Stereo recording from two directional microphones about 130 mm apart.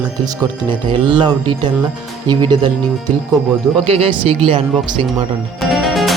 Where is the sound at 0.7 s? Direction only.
40° right (ahead or behind).